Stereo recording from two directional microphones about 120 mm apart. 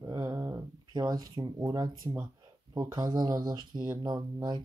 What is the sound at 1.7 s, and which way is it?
Speech, 35° right (ahead or behind).